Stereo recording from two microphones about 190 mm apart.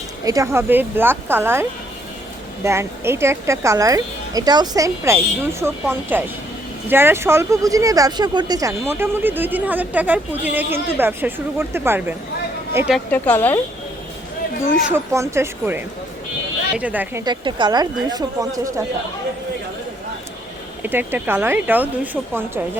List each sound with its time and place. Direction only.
0.3 s speech: 15° right (ahead or behind)
2.6 s speech: 15° right (ahead or behind)
12.9 s speech: 10° left (ahead or behind)
14.8 s speech: 10° right (ahead or behind)
17.2 s speech: 25° right (ahead or behind)
20.8 s speech: 10° right (ahead or behind)